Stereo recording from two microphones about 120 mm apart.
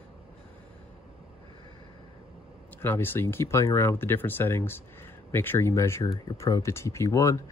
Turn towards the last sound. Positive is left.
turn(degrees=25)  # may be behind; listen again after turning